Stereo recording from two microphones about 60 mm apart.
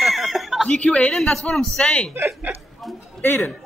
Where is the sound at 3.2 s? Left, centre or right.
Left.